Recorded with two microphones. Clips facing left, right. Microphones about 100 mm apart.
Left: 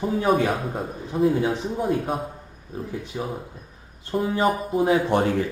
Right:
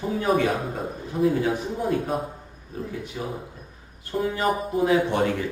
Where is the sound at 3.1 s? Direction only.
15° left (ahead or behind).